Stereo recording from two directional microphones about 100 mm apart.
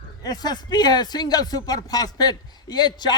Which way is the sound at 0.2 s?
40° left (ahead or behind).